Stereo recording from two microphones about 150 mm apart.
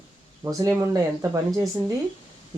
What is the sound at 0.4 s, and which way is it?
Speech, 20° right (ahead or behind).